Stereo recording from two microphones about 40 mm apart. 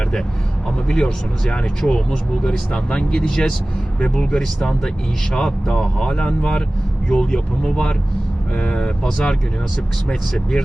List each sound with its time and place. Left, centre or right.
0.9 s speech: centre